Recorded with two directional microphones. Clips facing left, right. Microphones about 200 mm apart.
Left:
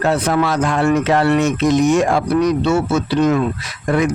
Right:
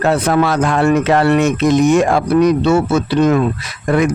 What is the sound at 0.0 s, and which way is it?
Speech, 60° right (ahead or behind).